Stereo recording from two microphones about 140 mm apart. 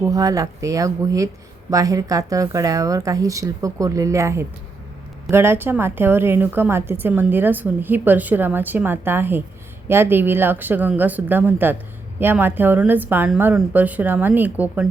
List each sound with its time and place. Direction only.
0.0 s a woman's voice: 25° right (ahead or behind)